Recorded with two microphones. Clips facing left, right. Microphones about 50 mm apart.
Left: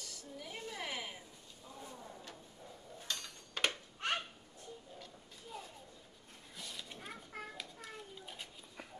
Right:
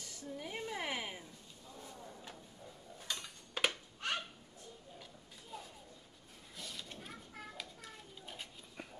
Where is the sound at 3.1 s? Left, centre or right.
Centre.